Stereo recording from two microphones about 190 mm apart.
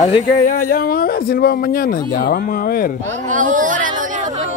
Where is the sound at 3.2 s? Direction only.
45° right (ahead or behind).